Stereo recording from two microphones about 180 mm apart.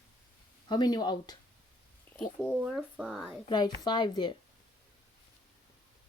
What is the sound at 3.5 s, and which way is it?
Speech, 25° left (ahead or behind).